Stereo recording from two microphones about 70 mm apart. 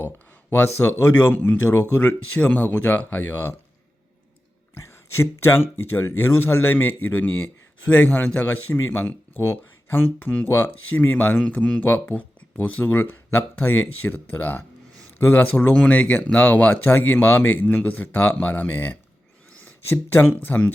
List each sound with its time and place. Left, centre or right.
0.5 s speech: left
4.7 s speech: left
20.1 s speech: left